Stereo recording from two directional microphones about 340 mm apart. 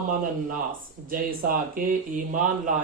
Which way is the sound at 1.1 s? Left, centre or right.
Right.